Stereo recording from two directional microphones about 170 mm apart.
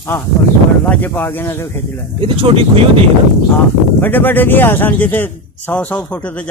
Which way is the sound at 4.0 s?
10° left (ahead or behind).